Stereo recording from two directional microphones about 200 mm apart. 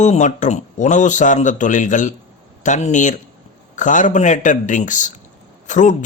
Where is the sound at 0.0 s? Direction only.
35° left (ahead or behind).